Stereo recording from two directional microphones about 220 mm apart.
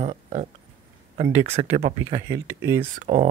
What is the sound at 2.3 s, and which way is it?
Speech, 10° right (ahead or behind).